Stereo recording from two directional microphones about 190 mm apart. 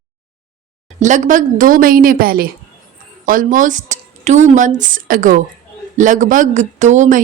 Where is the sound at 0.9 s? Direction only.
40° right (ahead or behind).